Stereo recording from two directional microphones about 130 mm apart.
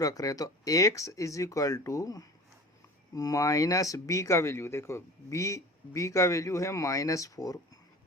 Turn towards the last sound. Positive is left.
turn(degrees=25)  # may be behind; listen again after turning